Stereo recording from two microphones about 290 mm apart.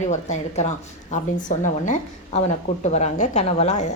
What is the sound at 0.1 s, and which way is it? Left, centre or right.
A woman's voice, left.